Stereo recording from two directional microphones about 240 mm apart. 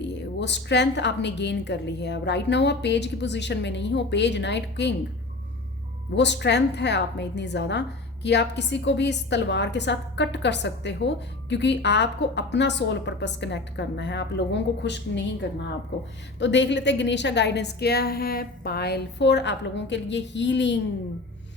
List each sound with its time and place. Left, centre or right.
0.0 s a woman's voice: left
6.1 s a woman's voice: left